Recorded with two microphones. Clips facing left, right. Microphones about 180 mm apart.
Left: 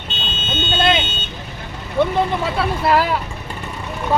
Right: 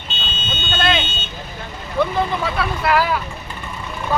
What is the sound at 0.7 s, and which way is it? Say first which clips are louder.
Vehicle: left 2 dB; 20° left (ahead or behind).